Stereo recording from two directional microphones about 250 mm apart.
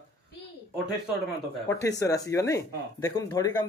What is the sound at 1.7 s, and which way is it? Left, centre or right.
Speech, centre.